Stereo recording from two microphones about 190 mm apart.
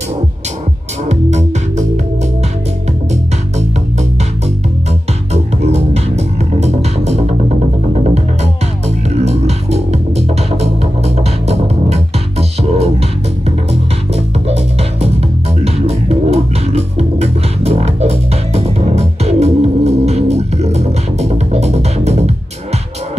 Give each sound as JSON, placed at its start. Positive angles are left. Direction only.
{"t": 1.0, "sound": "music", "side_deg": -35}
{"t": 5.3, "sound": "music", "side_deg": -35}
{"t": 14.1, "sound": "music", "side_deg": -30}